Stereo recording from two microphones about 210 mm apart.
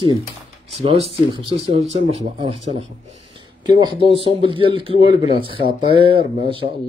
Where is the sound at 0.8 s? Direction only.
30° right (ahead or behind).